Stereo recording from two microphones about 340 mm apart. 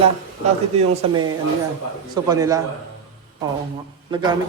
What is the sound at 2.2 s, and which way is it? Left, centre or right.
Speech, centre.